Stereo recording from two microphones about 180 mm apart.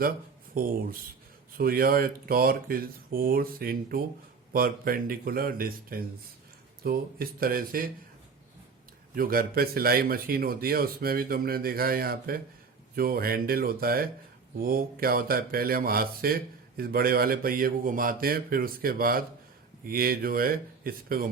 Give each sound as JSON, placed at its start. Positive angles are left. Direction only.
{"t": 0.5, "sound": "speech", "side_deg": -50}
{"t": 9.1, "sound": "speech", "side_deg": -55}